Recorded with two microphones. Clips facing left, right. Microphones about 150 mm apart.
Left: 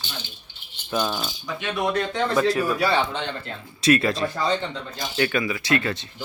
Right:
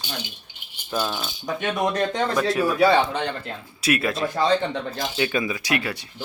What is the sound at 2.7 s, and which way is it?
Speech, 20° right (ahead or behind).